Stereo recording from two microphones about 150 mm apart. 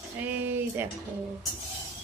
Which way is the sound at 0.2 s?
10° right (ahead or behind).